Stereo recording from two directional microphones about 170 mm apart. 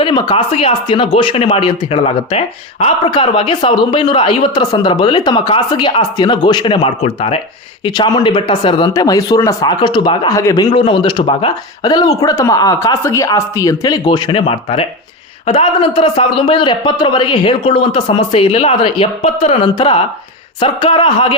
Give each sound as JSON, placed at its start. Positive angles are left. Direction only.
{"t": 0.0, "sound": "a man's voice", "side_deg": 25}